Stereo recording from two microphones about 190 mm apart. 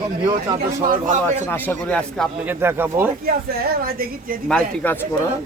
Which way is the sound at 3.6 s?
50° right (ahead or behind).